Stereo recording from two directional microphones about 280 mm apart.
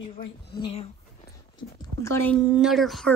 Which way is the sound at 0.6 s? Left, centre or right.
Left.